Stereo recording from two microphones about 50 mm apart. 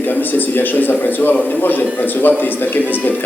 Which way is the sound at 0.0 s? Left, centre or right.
Left.